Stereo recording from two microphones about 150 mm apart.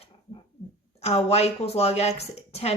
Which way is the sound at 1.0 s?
45° left (ahead or behind).